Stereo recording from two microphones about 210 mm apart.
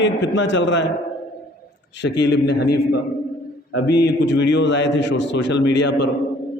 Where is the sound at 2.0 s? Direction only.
55° left (ahead or behind).